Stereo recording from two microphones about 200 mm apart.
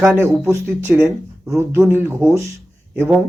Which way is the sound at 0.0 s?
15° right (ahead or behind).